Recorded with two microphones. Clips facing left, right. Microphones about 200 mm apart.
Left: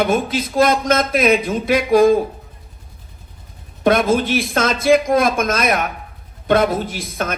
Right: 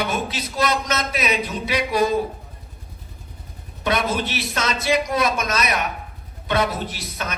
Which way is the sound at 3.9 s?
50° left (ahead or behind).